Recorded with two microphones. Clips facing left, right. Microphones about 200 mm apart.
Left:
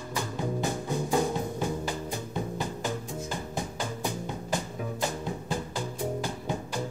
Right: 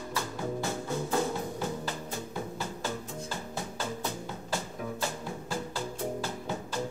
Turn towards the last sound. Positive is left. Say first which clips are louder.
# left 2 dB
turn(degrees=15)  # may be behind; listen again after turning